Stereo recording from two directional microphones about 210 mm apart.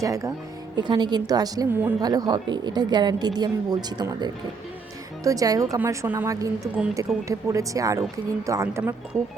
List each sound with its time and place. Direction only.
0.0 s speech: 15° right (ahead or behind)